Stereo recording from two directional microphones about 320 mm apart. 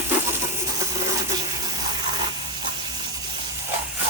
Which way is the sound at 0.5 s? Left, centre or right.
Centre.